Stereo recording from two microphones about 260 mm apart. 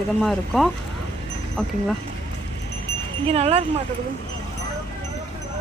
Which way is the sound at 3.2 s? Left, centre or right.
Right.